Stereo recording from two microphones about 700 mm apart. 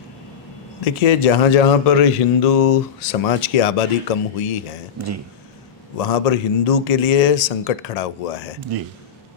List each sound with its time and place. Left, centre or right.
0.8 s a man's voice: left
6.0 s a man's voice: left